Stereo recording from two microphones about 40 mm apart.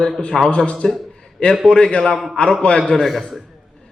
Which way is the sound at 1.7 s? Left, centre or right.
Left.